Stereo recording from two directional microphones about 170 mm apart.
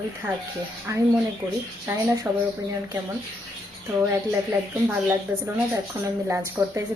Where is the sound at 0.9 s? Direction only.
15° right (ahead or behind).